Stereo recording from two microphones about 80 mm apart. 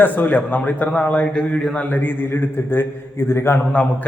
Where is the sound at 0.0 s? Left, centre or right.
Left.